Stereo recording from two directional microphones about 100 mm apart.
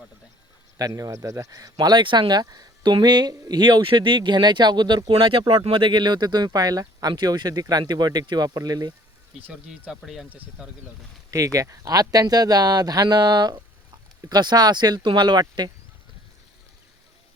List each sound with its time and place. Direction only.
0.8 s speech: 35° right (ahead or behind)
5.1 s speech: 60° right (ahead or behind); by 8.9 s 40° right (ahead or behind)
10.0 s speech: 5° right (ahead or behind)
11.3 s speech: 35° right (ahead or behind)